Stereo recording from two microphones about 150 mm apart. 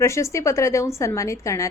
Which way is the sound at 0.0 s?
20° left (ahead or behind).